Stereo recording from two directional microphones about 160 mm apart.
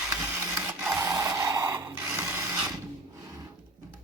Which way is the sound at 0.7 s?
10° right (ahead or behind).